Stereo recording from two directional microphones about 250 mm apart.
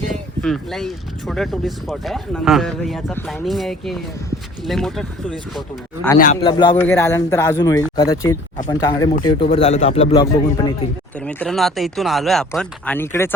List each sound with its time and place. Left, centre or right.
0.1 s speech: centre
6.4 s a man's voice: centre
11.2 s speech: centre